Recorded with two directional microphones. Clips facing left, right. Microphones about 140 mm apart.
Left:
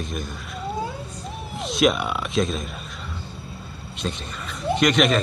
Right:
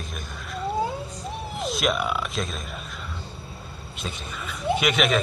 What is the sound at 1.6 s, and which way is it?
Speech, centre (ahead or behind).